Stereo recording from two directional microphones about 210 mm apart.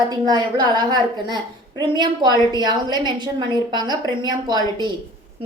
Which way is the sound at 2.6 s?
20° right (ahead or behind).